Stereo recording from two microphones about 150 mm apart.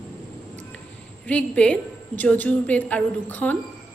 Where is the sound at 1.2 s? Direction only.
10° left (ahead or behind).